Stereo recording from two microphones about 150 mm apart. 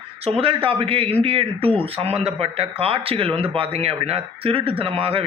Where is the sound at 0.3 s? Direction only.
40° right (ahead or behind).